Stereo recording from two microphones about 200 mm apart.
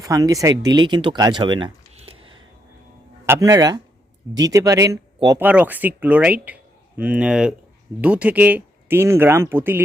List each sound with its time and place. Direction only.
0.0 s speech: 15° right (ahead or behind)
3.2 s speech: 15° right (ahead or behind)